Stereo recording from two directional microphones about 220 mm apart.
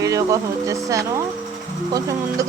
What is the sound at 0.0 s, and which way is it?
Speech, 15° right (ahead or behind).